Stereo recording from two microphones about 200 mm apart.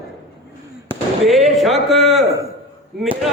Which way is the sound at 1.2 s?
Centre (ahead or behind).